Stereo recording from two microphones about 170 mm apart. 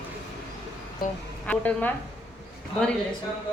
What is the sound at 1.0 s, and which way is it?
Speech, 55° left (ahead or behind).